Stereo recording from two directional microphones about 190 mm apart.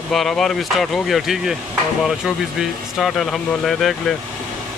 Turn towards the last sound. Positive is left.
turn(degrees=0)  # may be behind; listen again after turning